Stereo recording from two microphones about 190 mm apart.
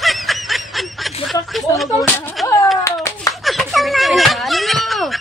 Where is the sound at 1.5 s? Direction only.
Centre (ahead or behind).